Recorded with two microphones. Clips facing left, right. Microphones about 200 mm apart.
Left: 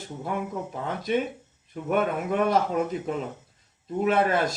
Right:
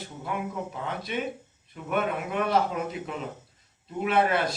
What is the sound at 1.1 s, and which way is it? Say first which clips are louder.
Speech: left 8 dB; 45° left (ahead or behind).